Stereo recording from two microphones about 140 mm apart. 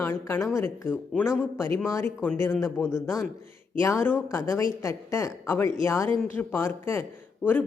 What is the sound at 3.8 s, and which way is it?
Speech, 20° left (ahead or behind).